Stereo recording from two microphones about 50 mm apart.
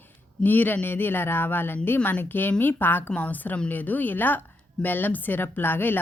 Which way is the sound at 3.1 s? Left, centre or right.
Left.